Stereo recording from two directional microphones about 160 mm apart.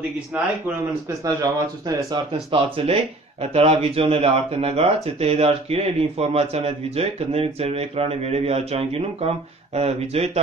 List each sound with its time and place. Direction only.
0.3 s speech: 10° right (ahead or behind)
1.2 s speech: 25° right (ahead or behind)
2.5 s speech: 35° right (ahead or behind)